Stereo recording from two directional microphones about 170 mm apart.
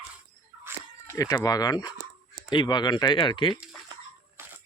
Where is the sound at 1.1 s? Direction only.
20° left (ahead or behind).